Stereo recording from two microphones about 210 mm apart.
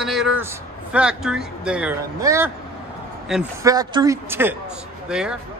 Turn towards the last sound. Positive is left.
turn(degrees=-5)  # may be behind; listen again after turning